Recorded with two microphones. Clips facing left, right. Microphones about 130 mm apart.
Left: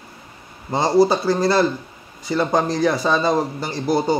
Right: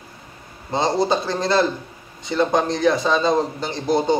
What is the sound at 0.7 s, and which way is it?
Speech, 20° right (ahead or behind).